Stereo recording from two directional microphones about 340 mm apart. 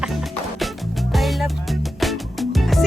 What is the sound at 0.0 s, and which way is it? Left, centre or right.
Music, centre.